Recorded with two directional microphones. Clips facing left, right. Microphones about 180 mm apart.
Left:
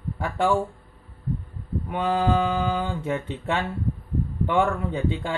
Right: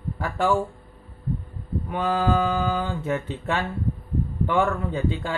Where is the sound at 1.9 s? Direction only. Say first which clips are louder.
Even; 20° left (ahead or behind).